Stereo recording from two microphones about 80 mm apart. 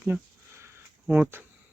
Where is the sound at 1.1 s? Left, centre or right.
Right.